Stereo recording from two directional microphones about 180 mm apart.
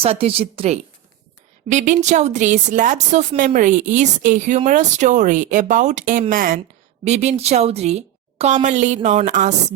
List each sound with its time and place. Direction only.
0.0 s speech: 35° right (ahead or behind); by 6.6 s 50° right (ahead or behind)
7.0 s a woman's voice: 40° right (ahead or behind)